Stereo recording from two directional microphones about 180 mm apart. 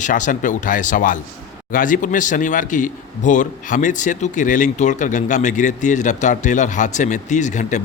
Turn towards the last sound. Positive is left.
turn(degrees=45)  # may be behind; listen again after turning